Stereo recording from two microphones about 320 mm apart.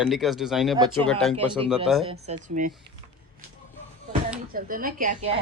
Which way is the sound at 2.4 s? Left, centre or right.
Right.